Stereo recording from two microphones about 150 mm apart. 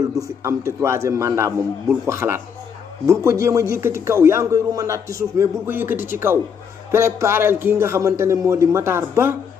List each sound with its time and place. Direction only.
0.2 s a man's voice: 20° right (ahead or behind)